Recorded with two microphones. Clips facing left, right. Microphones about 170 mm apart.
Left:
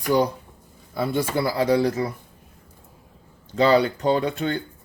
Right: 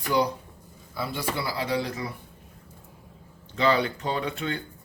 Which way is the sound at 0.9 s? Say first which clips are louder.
Left 7 dB; 50° left (ahead or behind).